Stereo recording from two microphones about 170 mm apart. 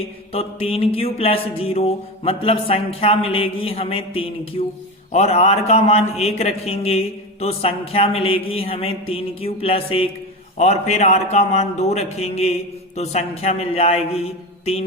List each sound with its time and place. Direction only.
0.3 s a man's voice: 35° left (ahead or behind)